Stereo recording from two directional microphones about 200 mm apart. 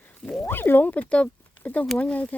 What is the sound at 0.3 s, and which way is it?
Speech, 5° left (ahead or behind).